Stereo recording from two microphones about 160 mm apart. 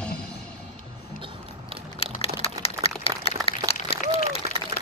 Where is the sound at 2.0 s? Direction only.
40° left (ahead or behind).